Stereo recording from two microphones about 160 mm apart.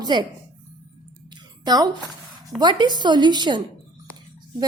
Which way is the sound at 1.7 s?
25° right (ahead or behind).